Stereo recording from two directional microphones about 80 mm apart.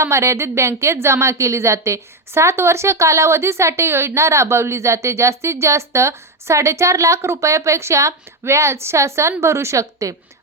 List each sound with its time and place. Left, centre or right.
0.0 s a woman's voice: right